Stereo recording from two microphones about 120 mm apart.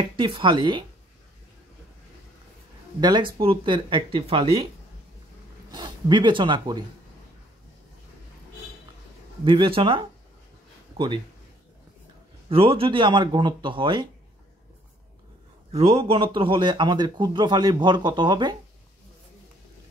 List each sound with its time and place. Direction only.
0.2 s a man's voice: 40° right (ahead or behind)
3.0 s speech: 35° right (ahead or behind)
5.7 s speech: 40° right (ahead or behind)
9.4 s speech: 45° right (ahead or behind)
12.4 s a man's voice: 50° right (ahead or behind)
15.7 s a man's voice: 55° right (ahead or behind)